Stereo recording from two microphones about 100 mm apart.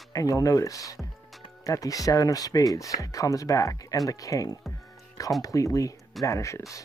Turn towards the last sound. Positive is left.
turn(degrees=30)  # may be behind; listen again after turning